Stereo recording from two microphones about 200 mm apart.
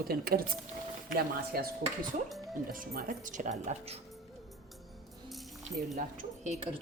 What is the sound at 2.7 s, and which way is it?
Speech, 45° right (ahead or behind).